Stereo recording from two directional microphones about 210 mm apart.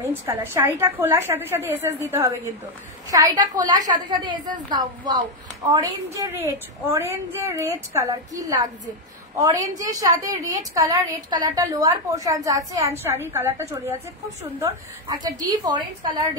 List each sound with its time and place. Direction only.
0.0 s a woman's voice: 10° right (ahead or behind)
15.3 s a woman's voice: 20° right (ahead or behind)